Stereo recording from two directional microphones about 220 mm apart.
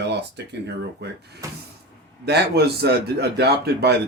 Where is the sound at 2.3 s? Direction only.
50° right (ahead or behind).